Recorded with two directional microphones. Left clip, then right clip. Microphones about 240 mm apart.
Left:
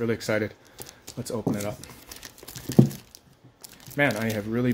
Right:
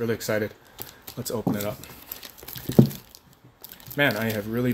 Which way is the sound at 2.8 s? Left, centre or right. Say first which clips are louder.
Right 2 dB; centre.